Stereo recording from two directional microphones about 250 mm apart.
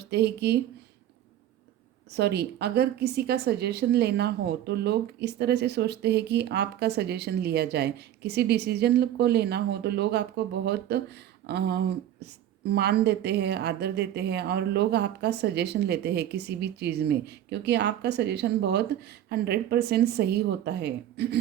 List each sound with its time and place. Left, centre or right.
0.0 s speech: right
2.1 s a woman's voice: right